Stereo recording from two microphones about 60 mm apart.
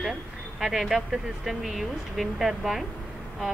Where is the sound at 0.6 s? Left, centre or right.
Centre.